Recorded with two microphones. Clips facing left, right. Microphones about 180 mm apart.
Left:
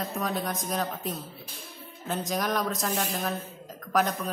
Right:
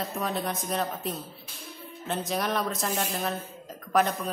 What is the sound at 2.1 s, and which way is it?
A man's voice, centre (ahead or behind).